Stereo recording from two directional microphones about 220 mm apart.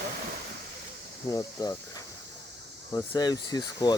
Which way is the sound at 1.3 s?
15° left (ahead or behind).